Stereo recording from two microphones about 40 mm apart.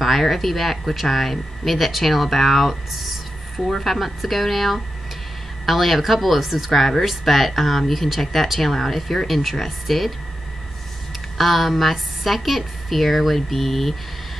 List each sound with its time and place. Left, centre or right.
0.0 s speech: centre
11.3 s speech: centre